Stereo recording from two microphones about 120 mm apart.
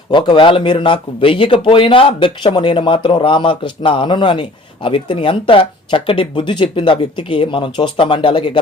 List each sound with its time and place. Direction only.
0.1 s speech: 40° left (ahead or behind)